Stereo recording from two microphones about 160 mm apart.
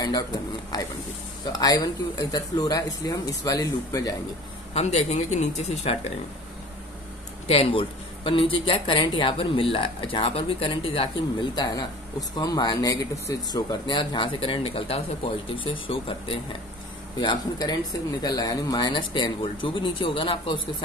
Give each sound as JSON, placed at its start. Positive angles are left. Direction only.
{"t": 0.7, "sound": "speech", "side_deg": 25}
{"t": 4.7, "sound": "speech", "side_deg": 45}
{"t": 7.4, "sound": "a woman's voice", "side_deg": 40}